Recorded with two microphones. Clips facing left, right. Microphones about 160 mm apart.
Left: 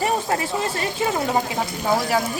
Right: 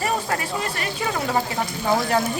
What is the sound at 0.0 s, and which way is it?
Speech, 25° left (ahead or behind).